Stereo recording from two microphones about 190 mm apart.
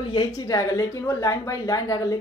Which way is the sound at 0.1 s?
20° left (ahead or behind).